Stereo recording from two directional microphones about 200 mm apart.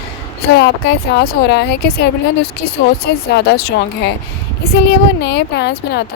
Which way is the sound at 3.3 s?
55° left (ahead or behind).